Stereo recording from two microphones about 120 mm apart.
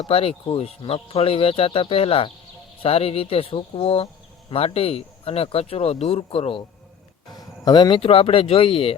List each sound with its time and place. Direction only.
0.1 s speech: 50° left (ahead or behind)
7.3 s speech: 35° left (ahead or behind); by 9.0 s 50° left (ahead or behind)